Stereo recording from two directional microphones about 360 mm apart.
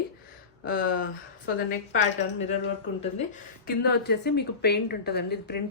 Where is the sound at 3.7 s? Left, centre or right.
Left.